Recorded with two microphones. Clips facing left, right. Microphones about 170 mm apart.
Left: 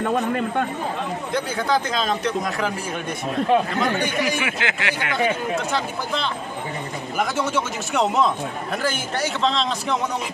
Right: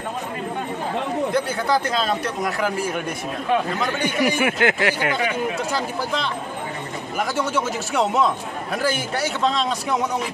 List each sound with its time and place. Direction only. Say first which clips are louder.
1.3 s speech: left 2 dB; 10° right (ahead or behind)
4.2 s speech: right 5 dB; 45° right (ahead or behind)
7.2 s speech: even; 5° right (ahead or behind)